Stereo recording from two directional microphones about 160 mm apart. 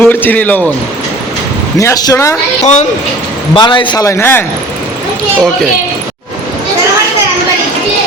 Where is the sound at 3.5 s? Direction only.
30° left (ahead or behind); by 4.4 s 15° left (ahead or behind).